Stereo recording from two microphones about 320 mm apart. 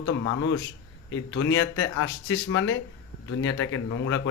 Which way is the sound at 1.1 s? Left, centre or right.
Left.